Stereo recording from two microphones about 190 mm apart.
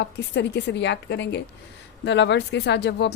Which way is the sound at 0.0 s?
65° left (ahead or behind).